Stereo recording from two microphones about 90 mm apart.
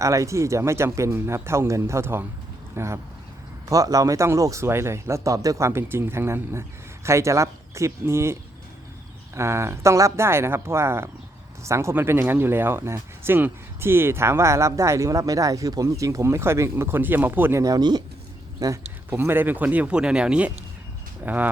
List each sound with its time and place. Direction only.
0.0 s speech: 35° right (ahead or behind)
3.7 s speech: 40° right (ahead or behind); by 17.6 s 20° right (ahead or behind)
17.6 s speech: 45° right (ahead or behind)
18.6 s speech: 40° right (ahead or behind)
19.1 s speech: 25° right (ahead or behind)